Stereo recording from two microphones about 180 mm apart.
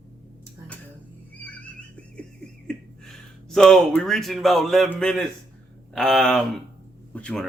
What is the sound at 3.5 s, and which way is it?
Speech, 5° left (ahead or behind).